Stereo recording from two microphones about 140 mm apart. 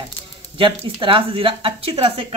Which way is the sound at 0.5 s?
40° right (ahead or behind).